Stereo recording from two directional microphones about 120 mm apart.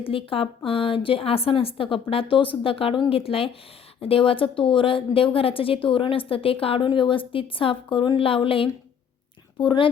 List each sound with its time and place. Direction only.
0.0 s a woman's voice: 50° left (ahead or behind)